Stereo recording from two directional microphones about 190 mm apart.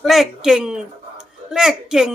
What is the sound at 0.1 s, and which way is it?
Speech, centre (ahead or behind).